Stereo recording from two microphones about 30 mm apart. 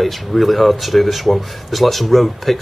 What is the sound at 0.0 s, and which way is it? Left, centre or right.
Speech, centre.